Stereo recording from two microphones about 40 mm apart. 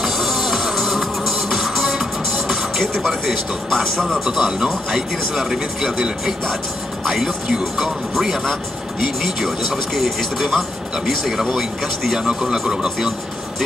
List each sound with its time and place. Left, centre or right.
0.0 s music: centre
3.3 s speech: centre
7.2 s speech: centre
9.9 s speech: centre
12.2 s a man's voice: centre